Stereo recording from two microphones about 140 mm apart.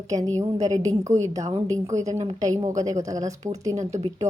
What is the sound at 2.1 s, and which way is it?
Speech, 50° right (ahead or behind).